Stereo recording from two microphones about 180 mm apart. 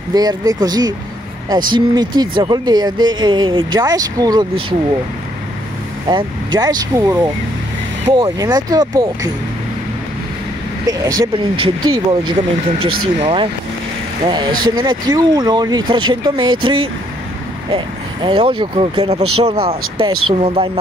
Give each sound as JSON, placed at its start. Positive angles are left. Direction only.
{"t": 0.1, "sound": "speech", "side_deg": -20}
{"t": 6.0, "sound": "speech", "side_deg": -25}
{"t": 10.9, "sound": "speech", "side_deg": -20}